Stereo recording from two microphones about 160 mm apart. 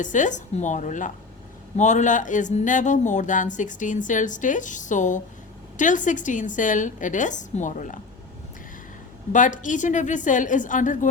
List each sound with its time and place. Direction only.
0.0 s speech: 50° left (ahead or behind)
9.3 s speech: 55° left (ahead or behind)